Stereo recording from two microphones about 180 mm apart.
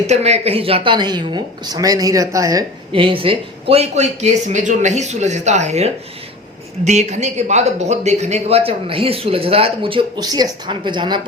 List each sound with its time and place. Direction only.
0.1 s speech: 35° right (ahead or behind); by 2.6 s 20° right (ahead or behind)
2.9 s speech: 30° right (ahead or behind)